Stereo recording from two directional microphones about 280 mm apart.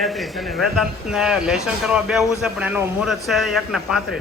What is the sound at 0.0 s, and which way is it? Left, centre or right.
Speech, centre.